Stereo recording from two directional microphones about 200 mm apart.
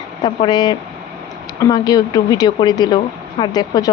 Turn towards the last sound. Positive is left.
turn(degrees=20)  # may be behind; listen again after turning